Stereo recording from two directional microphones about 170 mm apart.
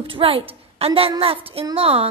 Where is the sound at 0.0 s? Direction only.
30° right (ahead or behind).